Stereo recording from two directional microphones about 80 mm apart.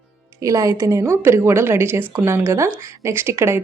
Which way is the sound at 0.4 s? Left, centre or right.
Right.